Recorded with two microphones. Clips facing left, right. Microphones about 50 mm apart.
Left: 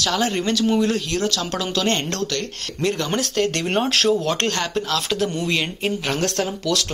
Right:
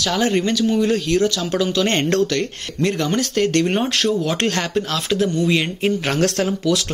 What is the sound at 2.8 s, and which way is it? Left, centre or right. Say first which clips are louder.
Speech: right 3 dB; centre.